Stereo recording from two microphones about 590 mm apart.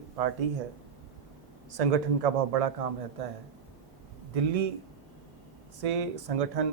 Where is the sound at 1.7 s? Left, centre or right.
Right.